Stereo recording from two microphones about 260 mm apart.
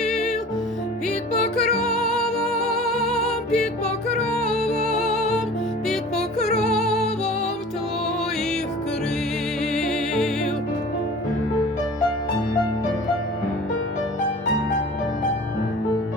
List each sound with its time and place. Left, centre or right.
0.0 s music: centre
1.7 s music: centre
4.6 s music: left
5.9 s music: centre
9.7 s music: centre